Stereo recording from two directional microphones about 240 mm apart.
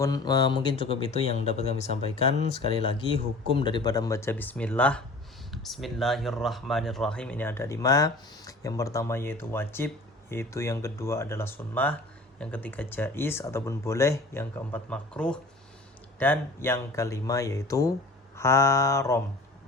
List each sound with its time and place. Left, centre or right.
0.0 s speech: centre